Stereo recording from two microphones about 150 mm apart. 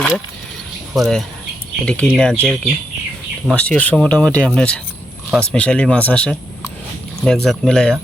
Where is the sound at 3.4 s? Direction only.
5° left (ahead or behind).